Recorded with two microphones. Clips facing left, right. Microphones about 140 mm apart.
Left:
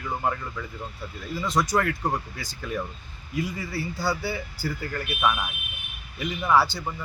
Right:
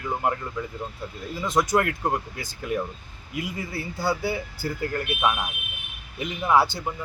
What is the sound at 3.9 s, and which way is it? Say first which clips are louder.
Speech: right 4 dB; 20° right (ahead or behind).